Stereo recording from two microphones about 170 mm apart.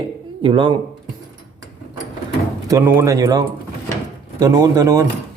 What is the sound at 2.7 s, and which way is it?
Speech, 10° right (ahead or behind).